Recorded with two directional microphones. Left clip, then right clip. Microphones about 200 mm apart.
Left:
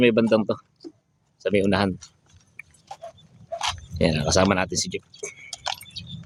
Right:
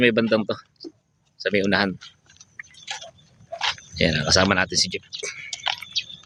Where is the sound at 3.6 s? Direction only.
5° right (ahead or behind).